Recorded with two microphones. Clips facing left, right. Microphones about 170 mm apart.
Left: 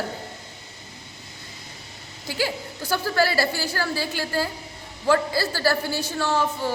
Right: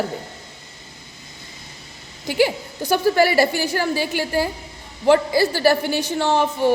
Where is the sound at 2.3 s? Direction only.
20° right (ahead or behind).